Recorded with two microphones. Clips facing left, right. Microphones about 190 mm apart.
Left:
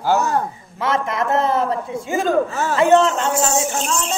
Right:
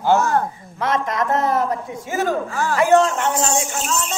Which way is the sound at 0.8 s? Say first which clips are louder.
Even; 25° left (ahead or behind).